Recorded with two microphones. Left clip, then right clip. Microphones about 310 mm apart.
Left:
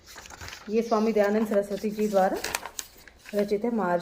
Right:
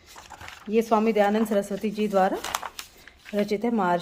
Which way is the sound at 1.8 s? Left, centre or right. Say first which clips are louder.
Right 1 dB; right.